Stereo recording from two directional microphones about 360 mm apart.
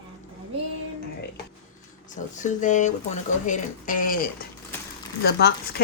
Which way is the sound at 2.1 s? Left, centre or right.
Left.